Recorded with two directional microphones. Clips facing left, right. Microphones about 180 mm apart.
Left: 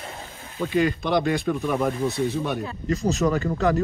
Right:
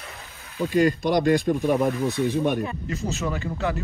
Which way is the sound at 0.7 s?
45° right (ahead or behind).